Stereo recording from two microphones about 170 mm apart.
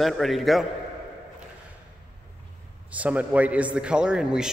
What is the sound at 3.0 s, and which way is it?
A man's voice, 10° right (ahead or behind).